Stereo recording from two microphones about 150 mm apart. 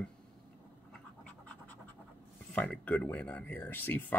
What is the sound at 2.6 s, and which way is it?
Speech, 10° left (ahead or behind).